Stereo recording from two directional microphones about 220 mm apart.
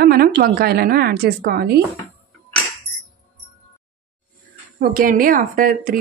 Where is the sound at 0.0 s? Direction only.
45° right (ahead or behind).